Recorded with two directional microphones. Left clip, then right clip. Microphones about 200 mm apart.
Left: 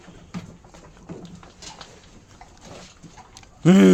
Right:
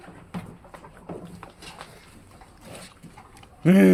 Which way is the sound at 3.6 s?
30° left (ahead or behind).